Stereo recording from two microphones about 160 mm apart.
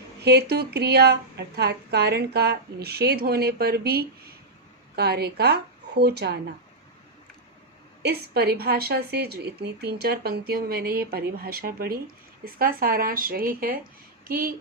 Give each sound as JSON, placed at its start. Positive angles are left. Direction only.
{"t": 0.2, "sound": "a woman's voice", "side_deg": -90}
{"t": 4.9, "sound": "speech", "side_deg": -90}
{"t": 8.0, "sound": "a woman's voice", "side_deg": -80}